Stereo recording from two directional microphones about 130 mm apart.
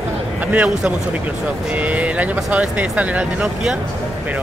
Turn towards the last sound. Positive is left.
turn(degrees=-5)  # may be behind; listen again after turning